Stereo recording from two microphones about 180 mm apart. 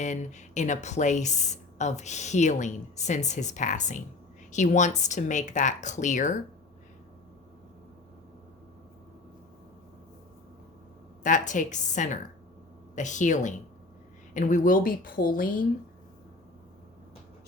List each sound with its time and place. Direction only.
0.0 s speech: 40° left (ahead or behind)
11.2 s speech: 45° left (ahead or behind)